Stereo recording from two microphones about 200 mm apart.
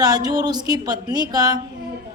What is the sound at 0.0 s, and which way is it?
Speech, 20° right (ahead or behind).